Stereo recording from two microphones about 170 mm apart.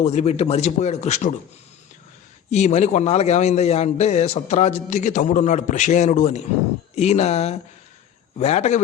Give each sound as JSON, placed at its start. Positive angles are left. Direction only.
{"t": 0.0, "sound": "speech", "side_deg": 40}
{"t": 2.5, "sound": "a man's voice", "side_deg": 40}